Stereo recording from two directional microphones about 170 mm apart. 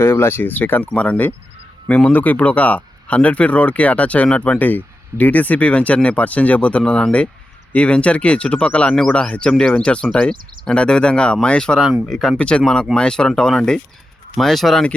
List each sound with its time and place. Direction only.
0.0 s speech: 15° left (ahead or behind)